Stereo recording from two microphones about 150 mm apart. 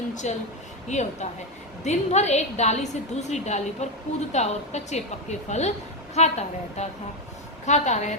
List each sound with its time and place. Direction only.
0.1 s a woman's voice: 55° left (ahead or behind)